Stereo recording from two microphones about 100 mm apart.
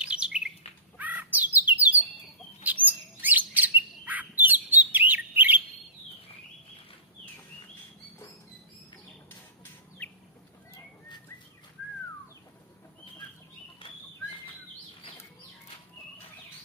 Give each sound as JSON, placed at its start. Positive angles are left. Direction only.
{"t": 0.0, "sound": "bird", "side_deg": -10}
{"t": 10.0, "sound": "bird", "side_deg": 15}
{"t": 13.8, "sound": "bird flight", "side_deg": 60}